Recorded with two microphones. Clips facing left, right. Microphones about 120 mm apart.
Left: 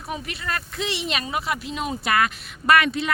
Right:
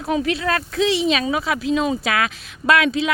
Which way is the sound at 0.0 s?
90° right.